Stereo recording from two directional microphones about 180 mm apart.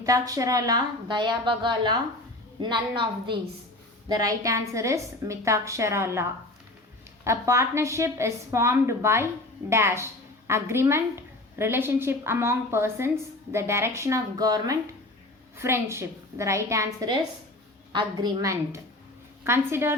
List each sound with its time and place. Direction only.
0.0 s a woman's voice: 20° right (ahead or behind)
7.3 s a woman's voice: 15° right (ahead or behind)